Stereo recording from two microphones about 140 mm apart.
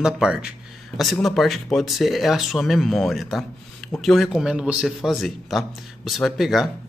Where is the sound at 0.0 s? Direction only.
5° right (ahead or behind).